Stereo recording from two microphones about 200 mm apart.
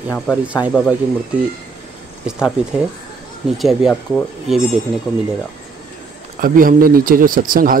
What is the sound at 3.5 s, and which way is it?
Speech, centre (ahead or behind).